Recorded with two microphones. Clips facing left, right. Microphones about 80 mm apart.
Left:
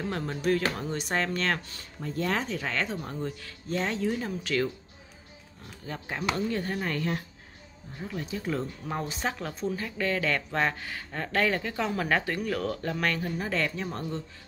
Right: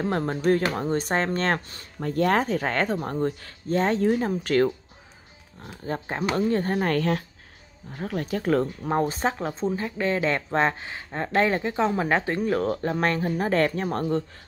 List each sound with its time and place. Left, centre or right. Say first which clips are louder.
0.0 s speech: right 6 dB; right
2.0 s speech: right 8 dB; right
5.9 s speech: right 5 dB; right
6.9 s speech: right 7 dB; right
7.9 s speech: right 7 dB; right
8.8 s speech: right 8 dB; right